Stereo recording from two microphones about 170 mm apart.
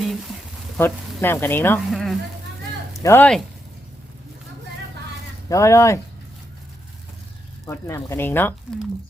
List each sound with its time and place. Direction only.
0.0 s frying: centre (ahead or behind)
0.8 s speech: 15° left (ahead or behind)
1.9 s a sound: centre (ahead or behind)
3.0 s speech: 10° left (ahead or behind)
5.5 s speech: 15° left (ahead or behind)
7.7 s speech: 15° left (ahead or behind)